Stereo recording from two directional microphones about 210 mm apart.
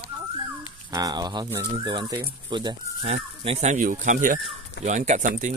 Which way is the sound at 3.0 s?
30° right (ahead or behind).